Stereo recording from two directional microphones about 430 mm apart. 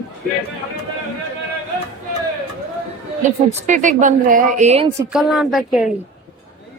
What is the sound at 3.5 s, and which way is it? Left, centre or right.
A woman's voice, centre.